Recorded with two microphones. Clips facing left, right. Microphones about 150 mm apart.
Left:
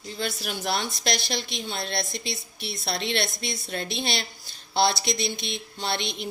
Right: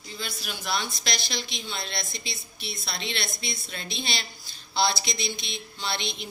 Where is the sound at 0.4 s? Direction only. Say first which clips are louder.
Even; 60° left (ahead or behind).